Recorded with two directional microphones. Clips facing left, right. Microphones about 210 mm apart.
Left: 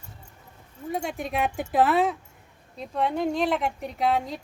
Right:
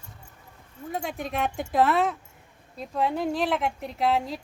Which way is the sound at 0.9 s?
Centre (ahead or behind).